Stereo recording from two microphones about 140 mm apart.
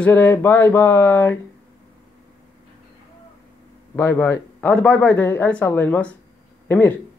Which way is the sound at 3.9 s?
15° left (ahead or behind).